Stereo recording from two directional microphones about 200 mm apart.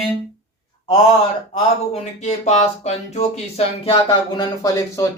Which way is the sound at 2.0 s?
35° left (ahead or behind).